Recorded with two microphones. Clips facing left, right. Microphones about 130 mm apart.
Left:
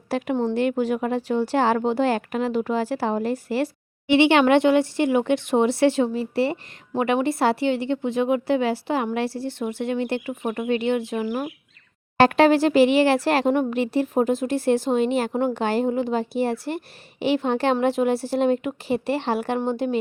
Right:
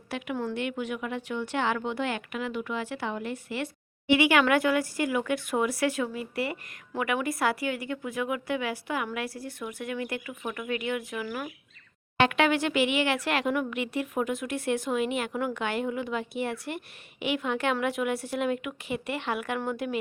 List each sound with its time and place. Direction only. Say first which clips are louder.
0.1 s speech: left 9 dB; 35° left (ahead or behind)